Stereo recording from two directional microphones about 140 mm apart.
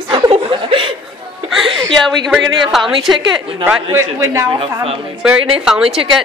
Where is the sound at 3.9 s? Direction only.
20° right (ahead or behind).